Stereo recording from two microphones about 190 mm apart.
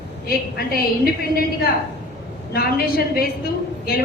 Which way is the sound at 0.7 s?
50° left (ahead or behind).